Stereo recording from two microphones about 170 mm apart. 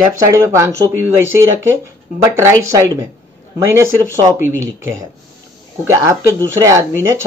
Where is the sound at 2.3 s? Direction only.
15° right (ahead or behind).